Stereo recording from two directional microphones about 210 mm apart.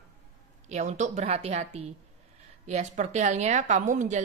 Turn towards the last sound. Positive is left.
turn(degrees=-35)  # may be behind; listen again after turning